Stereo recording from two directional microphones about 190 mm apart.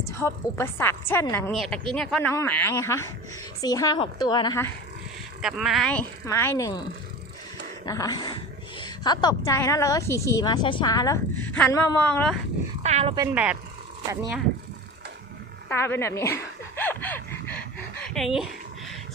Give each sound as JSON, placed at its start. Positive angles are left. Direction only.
{"t": 0.0, "sound": "a woman's voice", "side_deg": 15}
{"t": 5.4, "sound": "a woman's voice", "side_deg": 0}
{"t": 7.9, "sound": "a woman's voice", "side_deg": 20}
{"t": 12.8, "sound": "speech", "side_deg": -35}
{"t": 13.1, "sound": "speech", "side_deg": -10}
{"t": 15.7, "sound": "speech", "side_deg": 15}